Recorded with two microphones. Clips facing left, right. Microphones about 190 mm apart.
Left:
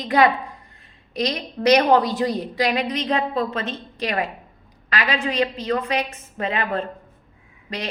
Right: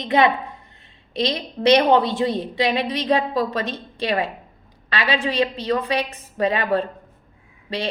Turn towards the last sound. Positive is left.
turn(degrees=-30)  # may be behind; listen again after turning